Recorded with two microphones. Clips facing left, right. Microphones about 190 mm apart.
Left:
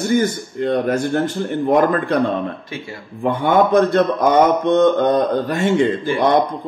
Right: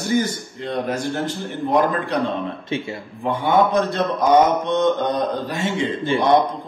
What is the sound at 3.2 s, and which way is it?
A man's voice, 55° left (ahead or behind).